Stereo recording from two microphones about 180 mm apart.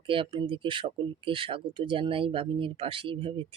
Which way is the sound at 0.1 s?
30° right (ahead or behind).